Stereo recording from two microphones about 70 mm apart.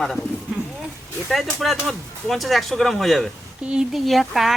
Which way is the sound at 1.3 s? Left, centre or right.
Centre.